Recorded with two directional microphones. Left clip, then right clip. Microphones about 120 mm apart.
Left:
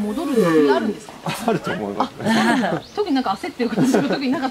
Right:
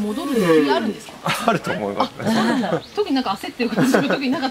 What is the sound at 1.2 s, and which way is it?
Speech, 30° right (ahead or behind).